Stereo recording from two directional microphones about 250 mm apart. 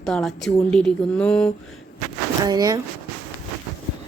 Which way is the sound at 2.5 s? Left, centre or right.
Centre.